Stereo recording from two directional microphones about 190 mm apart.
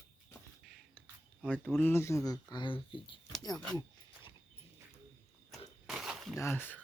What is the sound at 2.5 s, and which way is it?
Speech, 25° left (ahead or behind).